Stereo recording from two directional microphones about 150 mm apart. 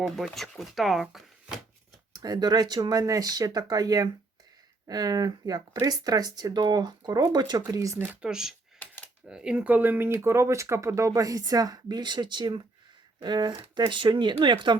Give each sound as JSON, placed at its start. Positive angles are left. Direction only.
{"t": 0.3, "sound": "speech", "side_deg": 0}
{"t": 2.1, "sound": "speech", "side_deg": -25}
{"t": 8.1, "sound": "speech", "side_deg": -5}